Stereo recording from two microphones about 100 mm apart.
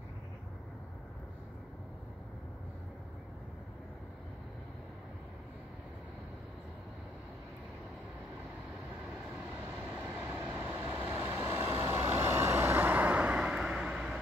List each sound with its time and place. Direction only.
10.0 s train: 25° right (ahead or behind)
11.0 s vehicle: 30° right (ahead or behind); by 14.1 s 5° right (ahead or behind)